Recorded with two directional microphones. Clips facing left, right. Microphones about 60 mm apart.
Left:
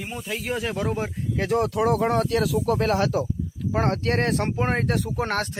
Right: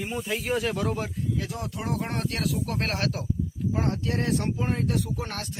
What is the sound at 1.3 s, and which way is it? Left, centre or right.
Speech, left.